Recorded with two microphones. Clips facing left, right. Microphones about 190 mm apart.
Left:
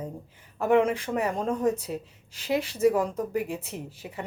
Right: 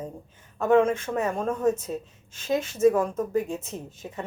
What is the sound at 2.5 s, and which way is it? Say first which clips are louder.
Speech: right 2 dB; 15° left (ahead or behind).